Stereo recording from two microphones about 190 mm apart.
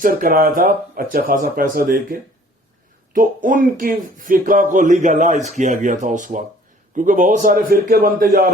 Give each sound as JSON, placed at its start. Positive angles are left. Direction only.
{"t": 0.0, "sound": "speech", "side_deg": -45}